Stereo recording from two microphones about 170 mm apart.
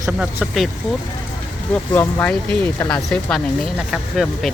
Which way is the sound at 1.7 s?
10° left (ahead or behind).